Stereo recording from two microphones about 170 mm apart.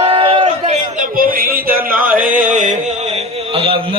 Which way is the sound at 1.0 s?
55° right (ahead or behind).